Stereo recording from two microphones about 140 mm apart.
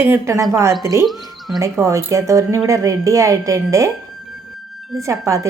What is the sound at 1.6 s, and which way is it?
Speech, 20° right (ahead or behind).